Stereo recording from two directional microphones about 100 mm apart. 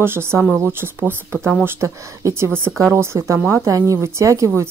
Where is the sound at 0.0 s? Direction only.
25° right (ahead or behind).